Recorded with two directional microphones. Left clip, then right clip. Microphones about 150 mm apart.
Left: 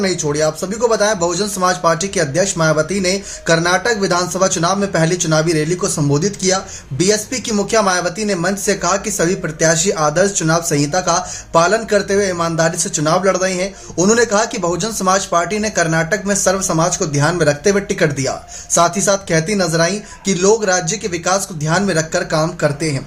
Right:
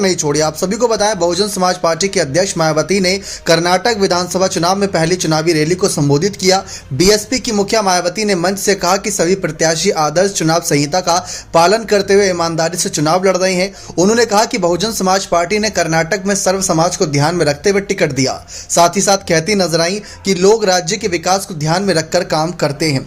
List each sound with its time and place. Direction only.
0.0 s speech: 40° right (ahead or behind)